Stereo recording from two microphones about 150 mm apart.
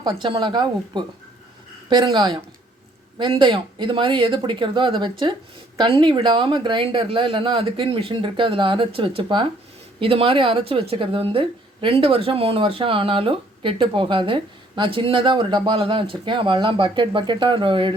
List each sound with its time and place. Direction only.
0.0 s speech: 30° right (ahead or behind)